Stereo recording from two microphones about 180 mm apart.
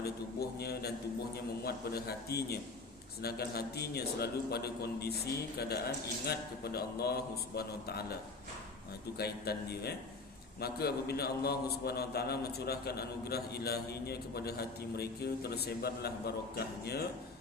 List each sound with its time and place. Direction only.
0.0 s a man's voice: 60° left (ahead or behind)